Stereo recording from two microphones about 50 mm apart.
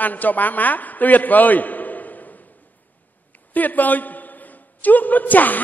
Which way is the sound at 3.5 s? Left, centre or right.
Left.